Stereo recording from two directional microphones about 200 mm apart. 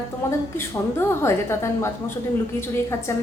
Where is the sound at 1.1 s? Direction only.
15° left (ahead or behind).